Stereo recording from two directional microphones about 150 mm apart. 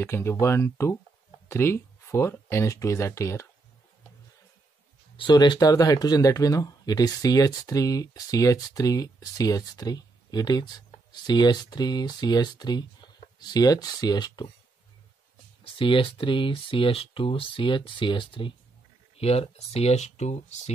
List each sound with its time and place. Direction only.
0.0 s speech: 15° left (ahead or behind)
5.1 s speech: 30° left (ahead or behind)
15.6 s speech: 35° left (ahead or behind)